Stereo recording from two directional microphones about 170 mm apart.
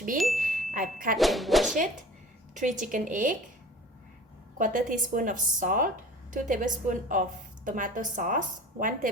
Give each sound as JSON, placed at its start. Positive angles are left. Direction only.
{"t": 0.2, "sound": "a sound", "side_deg": 0}
{"t": 0.7, "sound": "speech", "side_deg": -50}
{"t": 1.1, "sound": "speech", "side_deg": 0}
{"t": 2.6, "sound": "speech", "side_deg": -50}
{"t": 4.5, "sound": "speech", "side_deg": -50}